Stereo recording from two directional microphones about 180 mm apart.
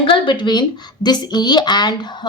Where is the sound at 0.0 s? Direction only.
25° left (ahead or behind).